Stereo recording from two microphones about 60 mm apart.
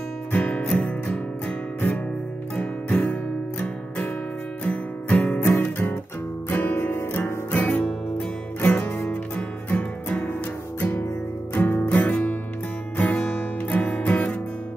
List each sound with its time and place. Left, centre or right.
0.3 s music: left
2.5 s guitar: left
4.6 s music: left
6.5 s guitar: left
7.5 s music: left